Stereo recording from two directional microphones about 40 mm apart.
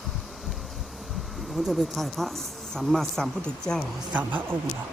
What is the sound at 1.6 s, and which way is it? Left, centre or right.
Speech, centre.